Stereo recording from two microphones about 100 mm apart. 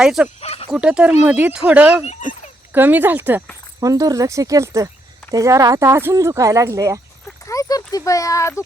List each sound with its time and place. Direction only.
0.0 s speech: 5° right (ahead or behind)
0.4 s speech: 85° left
0.7 s speech: 10° right (ahead or behind)
3.8 s speech: 35° right (ahead or behind)
7.4 s speech: 35° left (ahead or behind)